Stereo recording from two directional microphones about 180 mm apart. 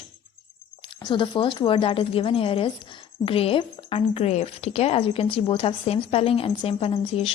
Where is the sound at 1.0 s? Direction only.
25° left (ahead or behind).